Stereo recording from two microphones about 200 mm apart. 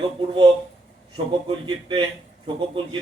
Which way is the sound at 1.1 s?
25° right (ahead or behind).